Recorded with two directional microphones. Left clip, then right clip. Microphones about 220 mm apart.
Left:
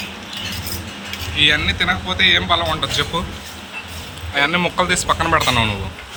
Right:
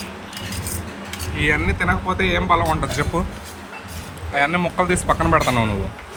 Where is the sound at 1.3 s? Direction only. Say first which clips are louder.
Left 5 dB; 15° right (ahead or behind).